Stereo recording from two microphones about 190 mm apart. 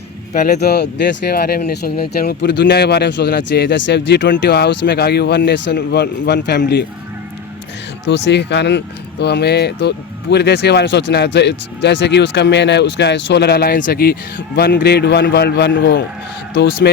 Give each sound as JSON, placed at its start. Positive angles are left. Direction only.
{"t": 0.3, "sound": "speech", "side_deg": 40}
{"t": 0.6, "sound": "speech", "side_deg": 60}
{"t": 8.0, "sound": "speech", "side_deg": 65}